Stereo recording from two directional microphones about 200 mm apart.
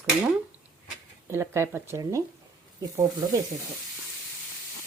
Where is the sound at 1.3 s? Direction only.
15° right (ahead or behind).